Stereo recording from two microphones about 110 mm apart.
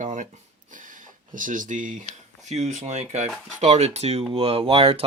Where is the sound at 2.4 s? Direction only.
90° right; by 4.2 s 75° right (ahead or behind).